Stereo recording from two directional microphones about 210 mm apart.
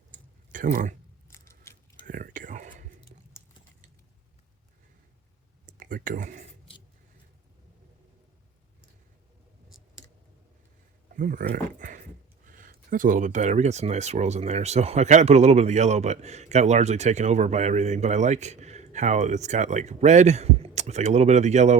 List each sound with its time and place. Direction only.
0.5 s speech: 40° right (ahead or behind)
1.3 s biting: 15° left (ahead or behind)
2.0 s whispering: 40° right (ahead or behind)
5.6 s speech: 40° right (ahead or behind)
11.2 s speech: 40° right (ahead or behind)